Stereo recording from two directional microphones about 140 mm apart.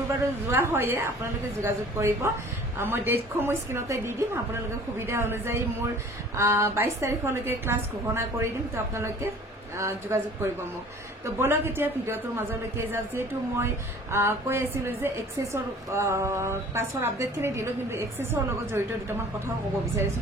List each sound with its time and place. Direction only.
0.5 s a woman's voice: 15° right (ahead or behind)